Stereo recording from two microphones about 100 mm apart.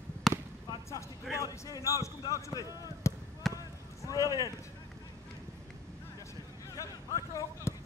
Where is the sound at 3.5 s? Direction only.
35° left (ahead or behind).